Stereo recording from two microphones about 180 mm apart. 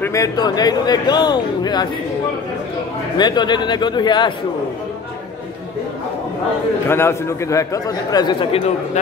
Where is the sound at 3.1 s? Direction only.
25° left (ahead or behind).